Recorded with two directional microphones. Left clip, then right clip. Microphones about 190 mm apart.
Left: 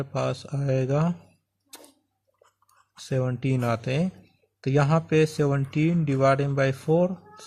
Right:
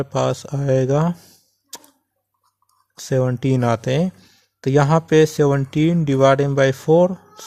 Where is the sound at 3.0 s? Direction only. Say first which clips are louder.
Right 8 dB; 35° right (ahead or behind).